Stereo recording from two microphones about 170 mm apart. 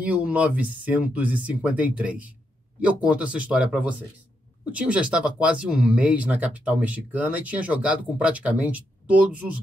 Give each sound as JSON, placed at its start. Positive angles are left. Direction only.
{"t": 0.0, "sound": "speech", "side_deg": -10}